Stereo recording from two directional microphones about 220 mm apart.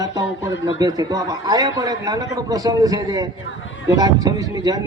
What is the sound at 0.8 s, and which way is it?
Speech, 15° right (ahead or behind).